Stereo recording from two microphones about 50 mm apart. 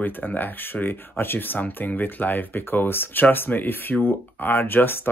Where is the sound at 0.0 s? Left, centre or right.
Left.